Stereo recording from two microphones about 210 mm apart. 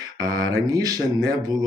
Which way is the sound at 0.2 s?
20° right (ahead or behind).